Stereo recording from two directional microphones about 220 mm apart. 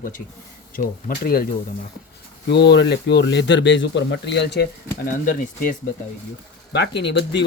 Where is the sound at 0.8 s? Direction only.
40° left (ahead or behind).